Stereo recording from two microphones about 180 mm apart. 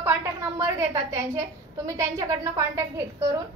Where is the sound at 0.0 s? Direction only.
15° right (ahead or behind).